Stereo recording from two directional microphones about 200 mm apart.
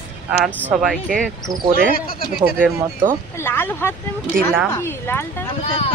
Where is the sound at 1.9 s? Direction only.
45° left (ahead or behind).